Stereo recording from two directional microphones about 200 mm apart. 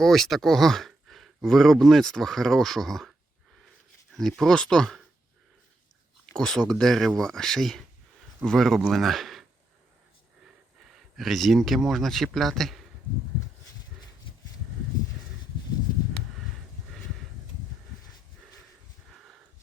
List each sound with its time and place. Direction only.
0.0 s speech: centre (ahead or behind)
6.3 s speech: 5° left (ahead or behind)
10.8 s speech: centre (ahead or behind)